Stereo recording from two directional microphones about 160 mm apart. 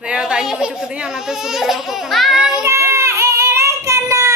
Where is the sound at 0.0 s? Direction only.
5° right (ahead or behind).